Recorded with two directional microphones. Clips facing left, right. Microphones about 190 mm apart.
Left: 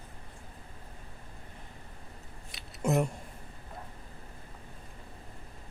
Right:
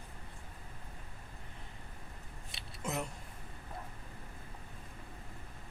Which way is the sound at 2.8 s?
45° left (ahead or behind).